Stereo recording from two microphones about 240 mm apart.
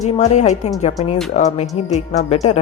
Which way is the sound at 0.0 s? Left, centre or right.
Left.